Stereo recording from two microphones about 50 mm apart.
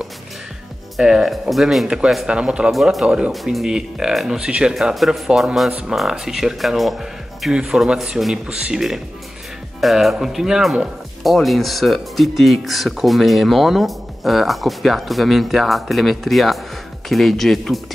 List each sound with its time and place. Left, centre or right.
1.0 s speech: centre
2.2 s speech: centre
2.7 s speech: centre
4.4 s speech: centre
4.9 s speech: centre
7.5 s speech: centre